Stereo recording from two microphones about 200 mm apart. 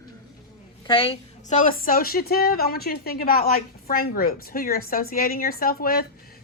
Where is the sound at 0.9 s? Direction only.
25° left (ahead or behind).